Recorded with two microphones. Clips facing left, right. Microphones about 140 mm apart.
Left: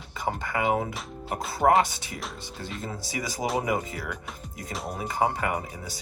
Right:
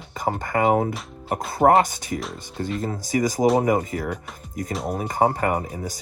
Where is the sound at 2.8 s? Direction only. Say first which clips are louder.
Right 11 dB; 45° right (ahead or behind).